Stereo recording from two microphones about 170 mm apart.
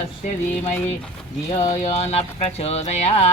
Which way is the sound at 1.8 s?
40° left (ahead or behind).